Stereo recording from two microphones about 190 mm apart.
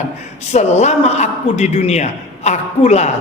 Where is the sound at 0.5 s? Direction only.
35° left (ahead or behind).